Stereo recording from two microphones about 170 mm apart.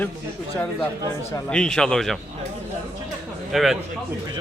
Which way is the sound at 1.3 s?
10° left (ahead or behind).